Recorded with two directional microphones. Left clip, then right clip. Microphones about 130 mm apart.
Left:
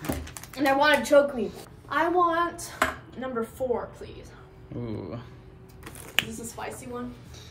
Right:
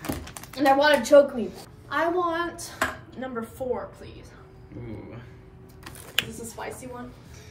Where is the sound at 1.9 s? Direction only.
30° left (ahead or behind).